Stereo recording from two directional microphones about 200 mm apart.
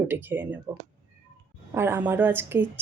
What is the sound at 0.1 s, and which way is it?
Speech, 10° right (ahead or behind).